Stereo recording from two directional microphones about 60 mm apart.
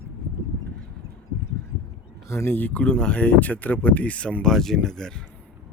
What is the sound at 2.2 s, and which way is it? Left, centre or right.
Speech, left.